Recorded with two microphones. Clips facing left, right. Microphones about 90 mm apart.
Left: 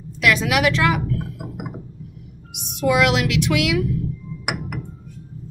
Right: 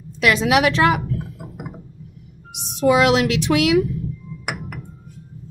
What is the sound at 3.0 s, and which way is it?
A woman's voice, 35° right (ahead or behind).